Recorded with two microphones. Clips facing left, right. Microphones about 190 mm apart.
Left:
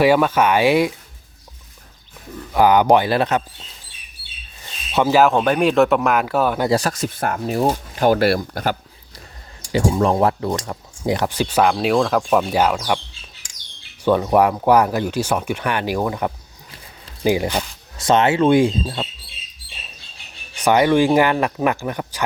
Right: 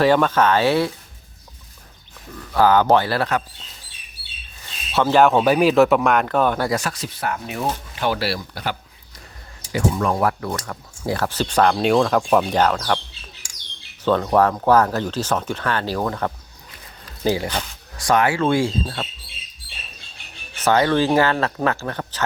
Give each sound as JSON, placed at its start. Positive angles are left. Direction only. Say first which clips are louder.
{"t": 0.0, "sound": "speech", "louder": "left 1 dB", "side_deg": 10}
{"t": 2.5, "sound": "speech", "louder": "left 2 dB", "side_deg": 15}
{"t": 4.9, "sound": "speech", "louder": "left 1 dB", "side_deg": 15}
{"t": 6.7, "sound": "speech", "louder": "left 5 dB", "side_deg": 40}
{"t": 9.7, "sound": "speech", "louder": "left 4 dB", "side_deg": 30}
{"t": 14.0, "sound": "speech", "louder": "left 2 dB", "side_deg": 10}
{"t": 20.6, "sound": "speech", "louder": "left 3 dB", "side_deg": 15}